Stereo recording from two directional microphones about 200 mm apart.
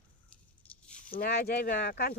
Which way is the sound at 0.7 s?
5° left (ahead or behind).